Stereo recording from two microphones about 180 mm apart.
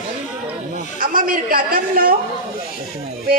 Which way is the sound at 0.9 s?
50° right (ahead or behind).